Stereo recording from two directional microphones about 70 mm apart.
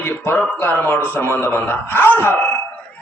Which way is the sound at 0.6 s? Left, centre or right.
Left.